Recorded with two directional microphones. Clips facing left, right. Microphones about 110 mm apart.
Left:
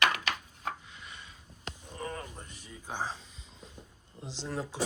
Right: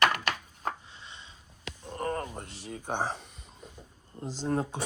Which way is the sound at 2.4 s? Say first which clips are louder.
Right 7 dB; 80° right.